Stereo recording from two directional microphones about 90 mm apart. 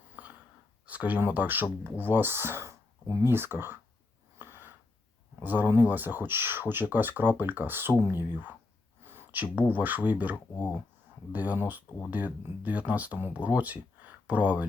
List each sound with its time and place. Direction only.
0.1 s gasp: 20° right (ahead or behind)
0.9 s speech: 15° right (ahead or behind)
4.4 s gasp: 25° right (ahead or behind)
5.4 s speech: 20° right (ahead or behind)
9.0 s a sound: 20° right (ahead or behind)
9.7 s speech: 20° right (ahead or behind)